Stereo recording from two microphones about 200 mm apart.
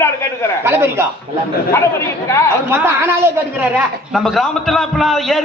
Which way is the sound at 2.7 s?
10° right (ahead or behind).